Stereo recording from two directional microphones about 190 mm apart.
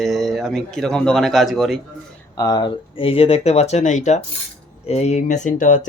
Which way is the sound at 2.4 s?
20° left (ahead or behind).